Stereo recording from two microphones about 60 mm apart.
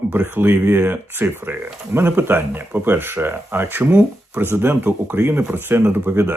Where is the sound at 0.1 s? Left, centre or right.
Right.